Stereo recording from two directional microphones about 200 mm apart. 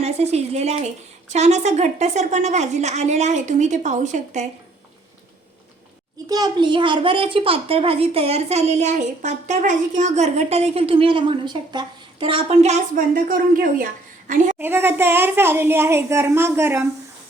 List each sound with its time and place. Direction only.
0.0 s a woman's voice: 30° right (ahead or behind)
6.2 s a child's voice: 20° right (ahead or behind); by 14.4 s 40° right (ahead or behind)
14.6 s a woman's voice: 10° right (ahead or behind)